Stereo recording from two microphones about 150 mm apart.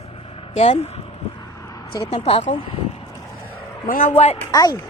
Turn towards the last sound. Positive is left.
turn(degrees=25)  # may be behind; listen again after turning